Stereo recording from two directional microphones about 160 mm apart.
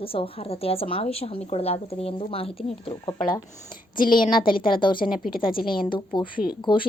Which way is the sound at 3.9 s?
30° left (ahead or behind).